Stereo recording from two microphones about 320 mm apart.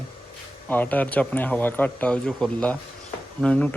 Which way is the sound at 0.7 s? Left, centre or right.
Centre.